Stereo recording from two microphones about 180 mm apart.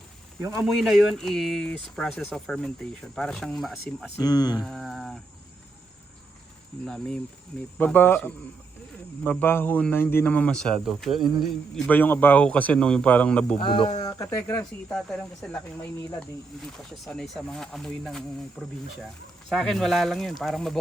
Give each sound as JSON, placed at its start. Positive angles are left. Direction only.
{"t": 0.6, "sound": "speech", "side_deg": 0}
{"t": 4.2, "sound": "speech", "side_deg": 20}
{"t": 4.6, "sound": "speech", "side_deg": 0}
{"t": 6.8, "sound": "speech", "side_deg": 5}
{"t": 13.6, "sound": "speech", "side_deg": 25}
{"t": 14.0, "sound": "a sound", "side_deg": 20}
{"t": 14.6, "sound": "speech", "side_deg": 5}